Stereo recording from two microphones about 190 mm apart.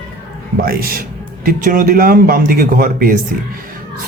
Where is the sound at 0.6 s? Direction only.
50° right (ahead or behind).